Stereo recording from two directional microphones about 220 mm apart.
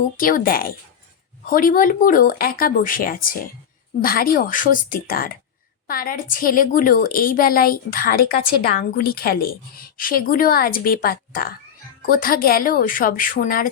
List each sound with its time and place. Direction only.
0.2 s a woman's voice: 40° left (ahead or behind)